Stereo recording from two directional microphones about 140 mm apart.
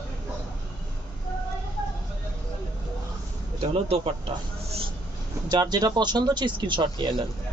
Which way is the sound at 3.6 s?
45° right (ahead or behind).